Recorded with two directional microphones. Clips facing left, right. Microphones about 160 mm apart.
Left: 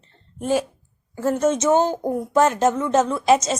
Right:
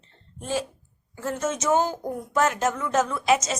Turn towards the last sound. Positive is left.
turn(degrees=30)  # may be behind; listen again after turning